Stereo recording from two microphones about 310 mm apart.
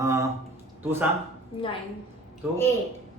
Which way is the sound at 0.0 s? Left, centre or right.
Centre.